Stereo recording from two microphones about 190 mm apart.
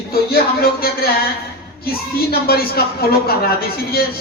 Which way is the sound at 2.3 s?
55° left (ahead or behind).